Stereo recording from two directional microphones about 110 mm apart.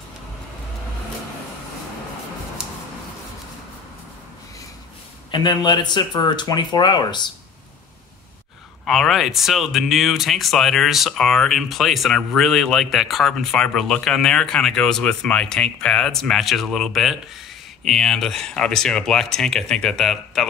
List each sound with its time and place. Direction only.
5.3 s speech: 40° left (ahead or behind)
8.8 s speech: centre (ahead or behind)